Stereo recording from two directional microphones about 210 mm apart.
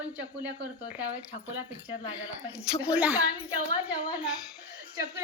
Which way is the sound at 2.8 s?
5° right (ahead or behind).